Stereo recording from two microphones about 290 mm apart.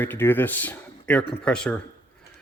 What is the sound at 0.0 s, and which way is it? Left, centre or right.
Speech, centre.